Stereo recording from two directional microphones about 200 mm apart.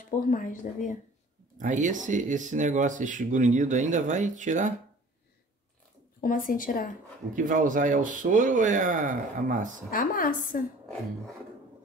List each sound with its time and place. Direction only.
0.3 s speech: 40° left (ahead or behind)
1.6 s speech: 40° right (ahead or behind)
6.2 s a woman's voice: 45° left (ahead or behind)
7.3 s speech: 40° right (ahead or behind)
9.8 s a woman's voice: 45° left (ahead or behind)